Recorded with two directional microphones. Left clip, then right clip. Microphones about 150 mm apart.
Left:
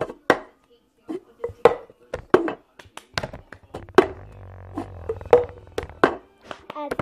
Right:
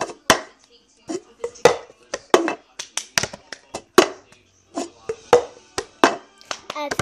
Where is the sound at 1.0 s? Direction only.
30° right (ahead or behind).